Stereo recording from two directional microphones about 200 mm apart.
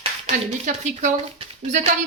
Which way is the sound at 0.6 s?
35° right (ahead or behind).